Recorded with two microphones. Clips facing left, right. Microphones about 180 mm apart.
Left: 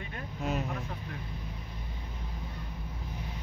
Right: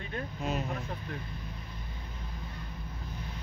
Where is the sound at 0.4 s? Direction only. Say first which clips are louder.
Left 2 dB; 15° left (ahead or behind).